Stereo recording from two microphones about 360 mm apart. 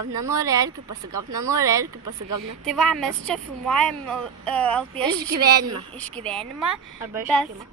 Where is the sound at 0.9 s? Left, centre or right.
Right.